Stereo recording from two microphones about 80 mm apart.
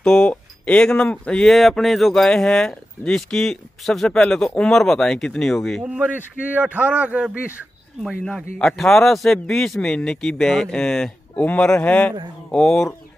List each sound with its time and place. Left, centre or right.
0.0 s speech: centre
1.5 s speech: centre
5.9 s a man's voice: right
8.0 s speech: centre
11.3 s speech: centre